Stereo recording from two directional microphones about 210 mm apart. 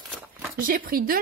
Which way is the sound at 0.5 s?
40° right (ahead or behind).